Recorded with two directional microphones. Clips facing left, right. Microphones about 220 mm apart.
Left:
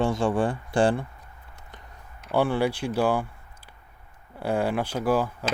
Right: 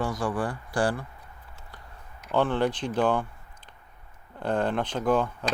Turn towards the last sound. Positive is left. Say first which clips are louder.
# even
turn(degrees=5)  # may be behind; listen again after turning